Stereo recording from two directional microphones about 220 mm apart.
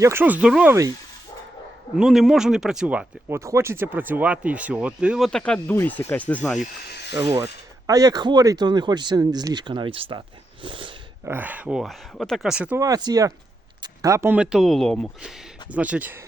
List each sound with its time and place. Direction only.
0.0 s speech: 10° right (ahead or behind)
2.0 s speech: centre (ahead or behind)
7.4 s speech: 15° right (ahead or behind)
11.3 s speech: 10° right (ahead or behind)